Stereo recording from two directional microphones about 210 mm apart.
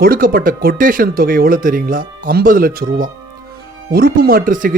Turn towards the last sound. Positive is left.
turn(degrees=-40)  # may be behind; listen again after turning